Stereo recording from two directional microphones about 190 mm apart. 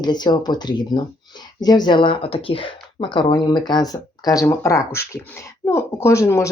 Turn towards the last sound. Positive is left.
turn(degrees=15)  # may be behind; listen again after turning